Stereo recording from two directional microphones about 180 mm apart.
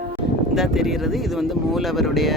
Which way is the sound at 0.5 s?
Centre (ahead or behind).